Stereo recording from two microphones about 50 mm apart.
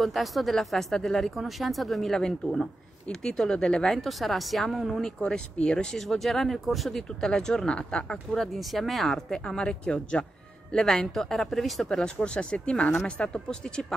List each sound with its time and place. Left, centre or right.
0.0 s speech: centre
5.0 s speech: centre
5.9 s speech: centre
6.9 s speech: centre
8.5 s speech: centre
9.6 s speech: centre
11.9 s speech: centre